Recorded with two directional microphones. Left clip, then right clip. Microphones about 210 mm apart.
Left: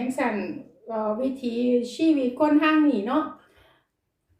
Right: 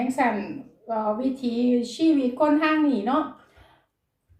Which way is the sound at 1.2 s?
10° left (ahead or behind).